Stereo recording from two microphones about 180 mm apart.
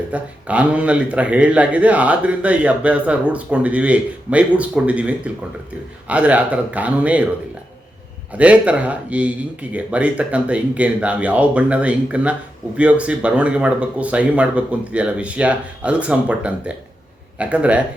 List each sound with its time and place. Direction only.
0.1 s speech: 5° right (ahead or behind)
8.3 s speech: 5° right (ahead or behind)